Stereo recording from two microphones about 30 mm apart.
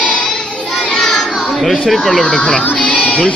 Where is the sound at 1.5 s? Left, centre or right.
Centre.